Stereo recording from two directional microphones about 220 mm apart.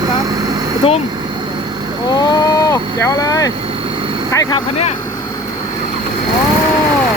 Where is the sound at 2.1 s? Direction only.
20° left (ahead or behind).